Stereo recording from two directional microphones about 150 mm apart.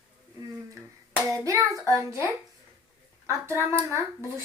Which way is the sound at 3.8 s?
20° left (ahead or behind).